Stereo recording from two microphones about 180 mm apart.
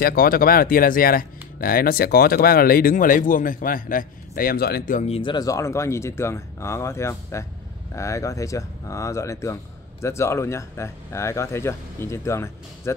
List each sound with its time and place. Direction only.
0.0 s speech: 55° left (ahead or behind); by 12.9 s 15° left (ahead or behind)